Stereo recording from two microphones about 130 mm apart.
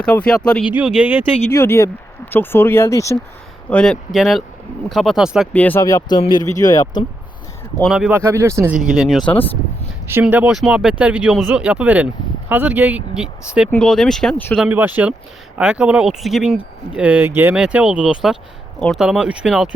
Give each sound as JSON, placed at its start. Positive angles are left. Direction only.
{"t": 0.0, "sound": "speech", "side_deg": 10}
{"t": 0.6, "sound": "speech", "side_deg": -10}
{"t": 1.5, "sound": "speech", "side_deg": 20}
{"t": 3.7, "sound": "speech", "side_deg": 10}
{"t": 4.1, "sound": "speech", "side_deg": 0}
{"t": 5.5, "sound": "speech", "side_deg": 10}
{"t": 5.8, "sound": "speech", "side_deg": 30}
{"t": 8.1, "sound": "speech", "side_deg": -20}
{"t": 8.7, "sound": "speech", "side_deg": -5}
{"t": 10.1, "sound": "speech", "side_deg": -15}
{"t": 13.7, "sound": "speech", "side_deg": 5}
{"t": 14.7, "sound": "speech", "side_deg": -15}